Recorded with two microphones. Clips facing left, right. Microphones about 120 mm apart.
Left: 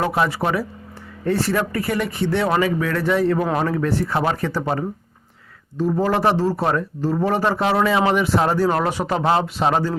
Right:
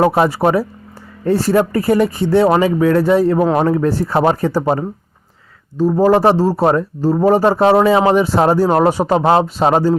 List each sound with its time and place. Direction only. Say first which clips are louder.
0.0 s speech: right 7 dB; 40° right (ahead or behind)